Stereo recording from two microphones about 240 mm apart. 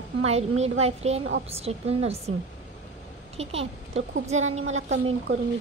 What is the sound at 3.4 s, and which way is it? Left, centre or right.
Speech, right.